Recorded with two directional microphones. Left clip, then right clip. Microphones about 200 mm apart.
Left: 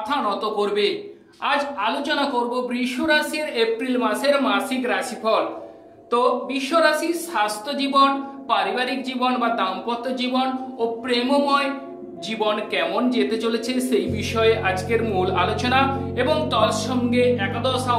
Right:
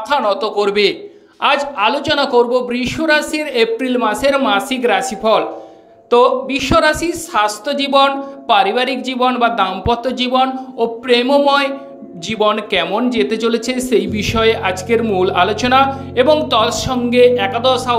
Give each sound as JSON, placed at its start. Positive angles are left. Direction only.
{"t": 0.1, "sound": "speech", "side_deg": -40}